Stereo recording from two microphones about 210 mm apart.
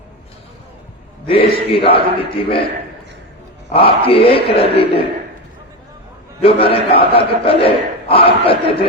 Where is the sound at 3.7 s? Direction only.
25° left (ahead or behind).